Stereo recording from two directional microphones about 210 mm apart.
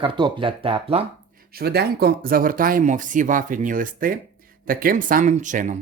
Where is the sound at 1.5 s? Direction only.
50° right (ahead or behind).